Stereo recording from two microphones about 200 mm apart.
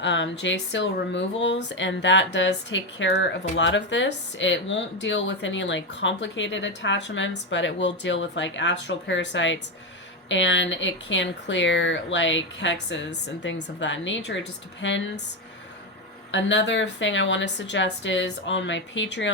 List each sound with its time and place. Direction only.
0.0 s speech: 65° left (ahead or behind)
16.3 s speech: 65° left (ahead or behind)